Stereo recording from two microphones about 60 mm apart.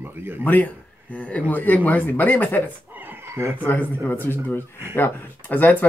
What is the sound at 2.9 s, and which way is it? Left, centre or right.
Neigh, right.